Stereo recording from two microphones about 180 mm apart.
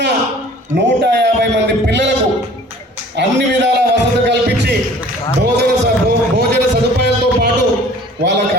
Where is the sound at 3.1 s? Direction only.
75° right (ahead or behind).